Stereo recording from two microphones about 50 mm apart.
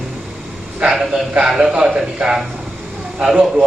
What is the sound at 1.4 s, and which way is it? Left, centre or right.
Speech, centre.